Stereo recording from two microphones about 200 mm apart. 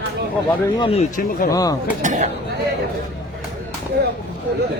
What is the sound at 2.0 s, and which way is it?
Speech, 35° right (ahead or behind).